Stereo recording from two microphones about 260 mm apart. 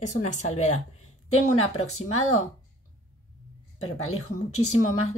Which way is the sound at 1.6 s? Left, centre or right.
Left.